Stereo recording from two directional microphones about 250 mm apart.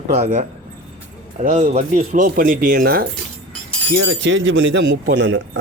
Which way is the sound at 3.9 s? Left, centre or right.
Right.